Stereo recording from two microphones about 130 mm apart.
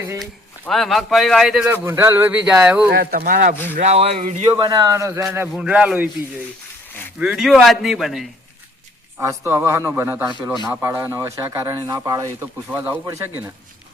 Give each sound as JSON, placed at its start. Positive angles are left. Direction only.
{"t": 0.7, "sound": "a man's voice", "side_deg": 0}
{"t": 1.7, "sound": "a man's voice", "side_deg": -20}
{"t": 3.2, "sound": "speech", "side_deg": -90}
{"t": 3.5, "sound": "speech", "side_deg": 15}
{"t": 3.8, "sound": "speech", "side_deg": -55}
{"t": 4.2, "sound": "speech", "side_deg": -70}
{"t": 4.4, "sound": "speech", "side_deg": -35}
{"t": 5.5, "sound": "a man's voice", "side_deg": -10}
{"t": 7.2, "sound": "a man's voice", "side_deg": -5}
{"t": 9.2, "sound": "speech", "side_deg": -20}
{"t": 12.4, "sound": "a man's voice", "side_deg": -15}